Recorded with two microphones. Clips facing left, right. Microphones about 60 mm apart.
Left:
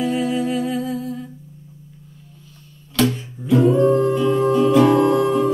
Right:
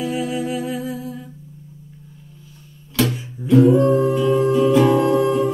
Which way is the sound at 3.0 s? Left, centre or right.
Centre.